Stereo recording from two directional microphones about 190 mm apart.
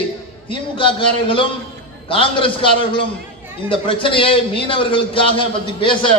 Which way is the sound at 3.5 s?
25° left (ahead or behind).